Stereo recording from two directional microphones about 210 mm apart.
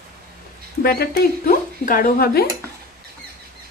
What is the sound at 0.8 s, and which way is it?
A woman's voice, 45° left (ahead or behind).